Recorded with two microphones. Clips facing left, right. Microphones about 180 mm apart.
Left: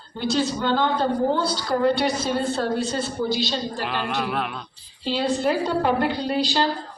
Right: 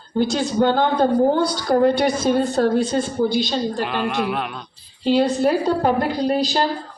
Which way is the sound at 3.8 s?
Centre (ahead or behind).